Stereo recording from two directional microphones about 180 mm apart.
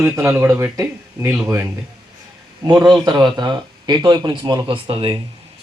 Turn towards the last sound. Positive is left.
turn(degrees=-30)  # may be behind; listen again after turning